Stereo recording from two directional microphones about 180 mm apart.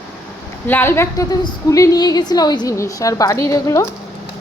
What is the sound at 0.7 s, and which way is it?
A woman's voice, 10° left (ahead or behind).